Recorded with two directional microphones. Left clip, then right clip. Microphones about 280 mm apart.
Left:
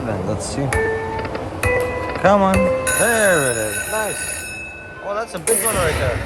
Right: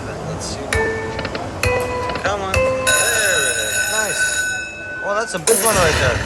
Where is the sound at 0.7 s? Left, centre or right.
Centre.